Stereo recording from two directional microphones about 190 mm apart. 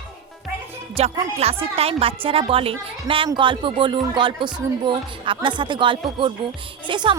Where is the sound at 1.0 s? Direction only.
30° right (ahead or behind).